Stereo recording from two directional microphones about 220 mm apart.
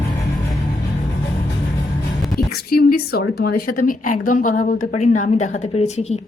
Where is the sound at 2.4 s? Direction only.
45° left (ahead or behind).